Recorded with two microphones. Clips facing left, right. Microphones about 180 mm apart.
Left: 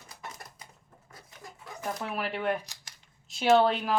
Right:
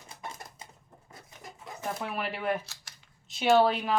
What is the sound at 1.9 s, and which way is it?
A woman's voice, centre (ahead or behind).